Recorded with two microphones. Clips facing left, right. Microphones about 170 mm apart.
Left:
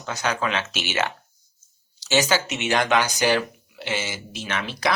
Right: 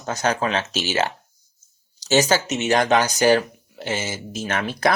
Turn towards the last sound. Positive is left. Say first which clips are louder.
# right 4 dB
turn(degrees=-50)  # may be behind; listen again after turning